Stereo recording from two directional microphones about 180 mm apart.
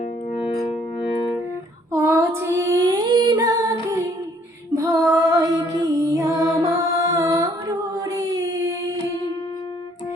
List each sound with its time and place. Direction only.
0.3 s music: 30° left (ahead or behind)
1.9 s female singing: 15° right (ahead or behind)
4.7 s music: 20° right (ahead or behind)